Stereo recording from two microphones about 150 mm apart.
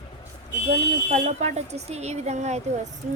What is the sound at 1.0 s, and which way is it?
Speech, 50° right (ahead or behind).